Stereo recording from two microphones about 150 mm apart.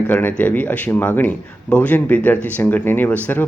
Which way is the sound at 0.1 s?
10° left (ahead or behind).